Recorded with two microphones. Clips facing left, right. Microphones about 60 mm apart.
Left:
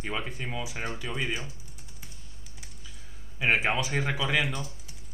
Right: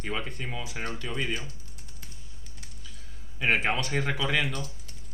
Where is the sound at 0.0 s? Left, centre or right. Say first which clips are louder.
Even; centre.